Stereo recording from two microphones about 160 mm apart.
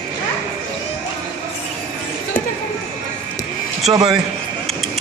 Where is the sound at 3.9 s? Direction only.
30° right (ahead or behind).